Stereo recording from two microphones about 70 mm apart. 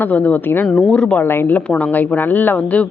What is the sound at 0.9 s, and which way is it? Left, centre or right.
Speech, centre.